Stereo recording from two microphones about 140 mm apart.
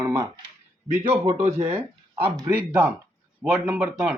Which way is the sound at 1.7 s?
15° right (ahead or behind).